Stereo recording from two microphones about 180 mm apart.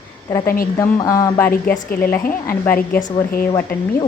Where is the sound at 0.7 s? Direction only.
20° left (ahead or behind).